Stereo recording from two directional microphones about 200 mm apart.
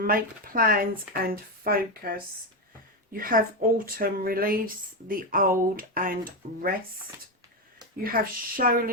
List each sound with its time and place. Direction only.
0.0 s a woman's voice: 45° right (ahead or behind)
8.0 s a woman's voice: 45° right (ahead or behind)